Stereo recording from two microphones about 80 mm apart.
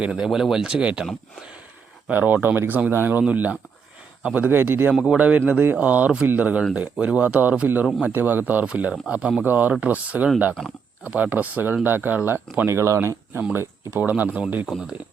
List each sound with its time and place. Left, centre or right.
0.0 s speech: centre
2.0 s speech: right
4.9 s speech: centre
9.4 s speech: right
13.9 s speech: right
14.7 s speech: centre